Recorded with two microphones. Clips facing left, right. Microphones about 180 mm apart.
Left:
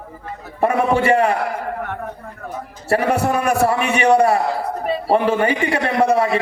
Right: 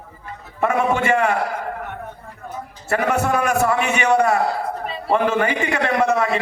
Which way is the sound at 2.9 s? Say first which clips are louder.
Left 2 dB; 30° left (ahead or behind).